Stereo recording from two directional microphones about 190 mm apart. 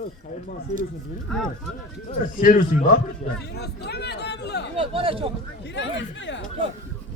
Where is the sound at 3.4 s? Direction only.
60° left (ahead or behind).